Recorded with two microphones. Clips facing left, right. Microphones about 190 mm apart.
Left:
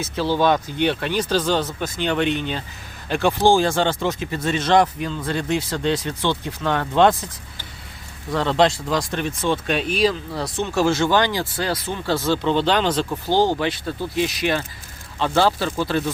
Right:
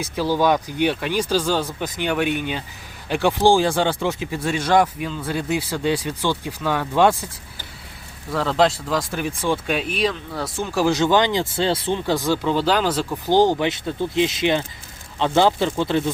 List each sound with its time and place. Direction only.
0.0 s speech: 10° right (ahead or behind)
8.3 s speech: centre (ahead or behind)
13.3 s speech: 15° right (ahead or behind)